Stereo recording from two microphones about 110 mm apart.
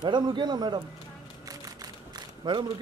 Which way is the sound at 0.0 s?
45° right (ahead or behind).